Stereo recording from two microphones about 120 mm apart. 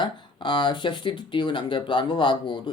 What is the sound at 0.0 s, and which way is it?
Speech, 40° left (ahead or behind).